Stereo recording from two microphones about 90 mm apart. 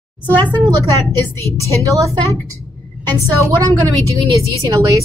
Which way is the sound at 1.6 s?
35° right (ahead or behind).